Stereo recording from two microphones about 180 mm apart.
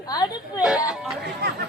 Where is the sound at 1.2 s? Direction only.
65° right (ahead or behind).